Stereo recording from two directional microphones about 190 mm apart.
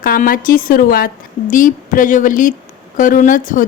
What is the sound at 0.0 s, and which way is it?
A woman's voice, 50° left (ahead or behind).